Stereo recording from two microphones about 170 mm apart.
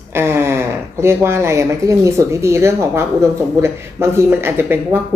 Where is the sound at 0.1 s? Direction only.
15° right (ahead or behind).